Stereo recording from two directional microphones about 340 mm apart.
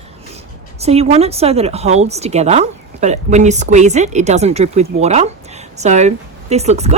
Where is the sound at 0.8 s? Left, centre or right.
Centre.